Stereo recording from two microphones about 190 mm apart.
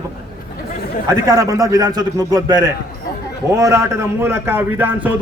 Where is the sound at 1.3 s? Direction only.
20° right (ahead or behind).